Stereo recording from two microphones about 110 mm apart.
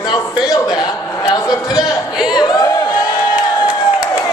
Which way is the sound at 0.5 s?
40° left (ahead or behind).